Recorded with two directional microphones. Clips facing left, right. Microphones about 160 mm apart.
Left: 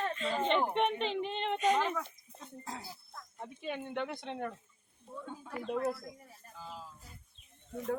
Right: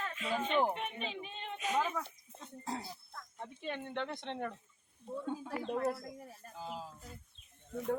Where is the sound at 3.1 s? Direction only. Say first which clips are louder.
Left 1 dB; 10° left (ahead or behind).